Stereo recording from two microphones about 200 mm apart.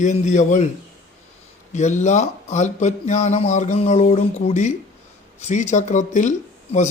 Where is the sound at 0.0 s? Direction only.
35° left (ahead or behind).